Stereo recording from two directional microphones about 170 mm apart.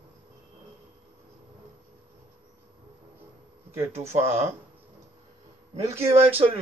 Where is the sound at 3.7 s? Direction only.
15° right (ahead or behind).